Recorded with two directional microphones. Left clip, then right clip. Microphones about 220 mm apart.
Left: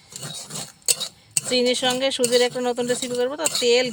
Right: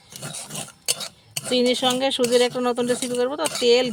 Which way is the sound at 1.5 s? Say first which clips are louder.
Even; 55° right (ahead or behind).